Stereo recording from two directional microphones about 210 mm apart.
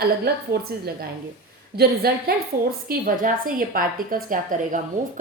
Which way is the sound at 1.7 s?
50° right (ahead or behind).